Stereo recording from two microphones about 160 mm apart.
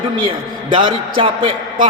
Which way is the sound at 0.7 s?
30° right (ahead or behind).